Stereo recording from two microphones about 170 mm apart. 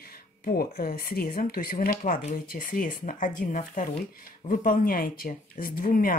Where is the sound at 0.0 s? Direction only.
65° left (ahead or behind).